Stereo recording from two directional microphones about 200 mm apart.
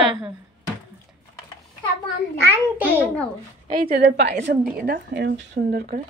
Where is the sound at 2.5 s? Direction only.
10° right (ahead or behind).